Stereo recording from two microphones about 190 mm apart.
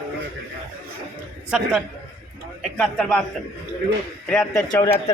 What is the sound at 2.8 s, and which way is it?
Speech, 5° left (ahead or behind).